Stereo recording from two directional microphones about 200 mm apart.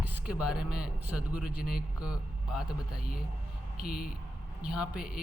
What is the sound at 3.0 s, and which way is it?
Speech, 45° left (ahead or behind).